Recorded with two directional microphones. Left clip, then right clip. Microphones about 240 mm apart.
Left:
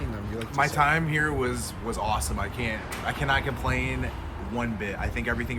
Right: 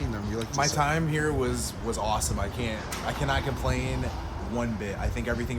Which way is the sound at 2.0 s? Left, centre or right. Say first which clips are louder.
Left 1 dB; centre.